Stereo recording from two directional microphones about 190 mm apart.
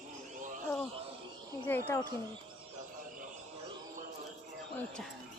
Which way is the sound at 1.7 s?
10° left (ahead or behind).